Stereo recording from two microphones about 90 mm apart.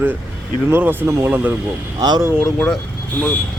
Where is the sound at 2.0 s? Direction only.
50° right (ahead or behind).